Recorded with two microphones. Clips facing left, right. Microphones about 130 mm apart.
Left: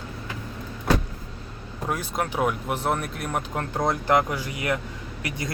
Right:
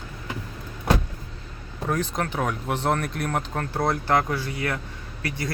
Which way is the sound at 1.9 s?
10° left (ahead or behind).